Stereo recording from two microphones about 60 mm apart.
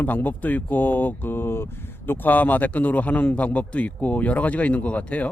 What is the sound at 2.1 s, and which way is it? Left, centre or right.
A man's voice, left.